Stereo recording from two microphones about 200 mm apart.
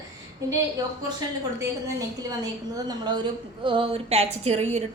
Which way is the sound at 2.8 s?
20° right (ahead or behind).